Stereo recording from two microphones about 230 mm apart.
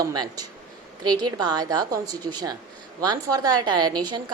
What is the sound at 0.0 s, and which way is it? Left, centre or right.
A woman's voice, centre.